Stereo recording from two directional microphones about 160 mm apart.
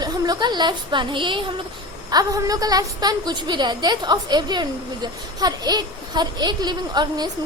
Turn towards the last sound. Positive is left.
turn(degrees=-25)  # may be behind; listen again after turning